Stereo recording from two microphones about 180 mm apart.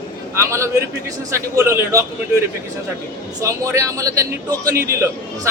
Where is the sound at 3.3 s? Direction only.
15° right (ahead or behind).